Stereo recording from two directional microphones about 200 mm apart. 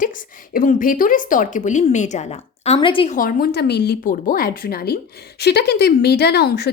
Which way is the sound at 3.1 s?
45° left (ahead or behind).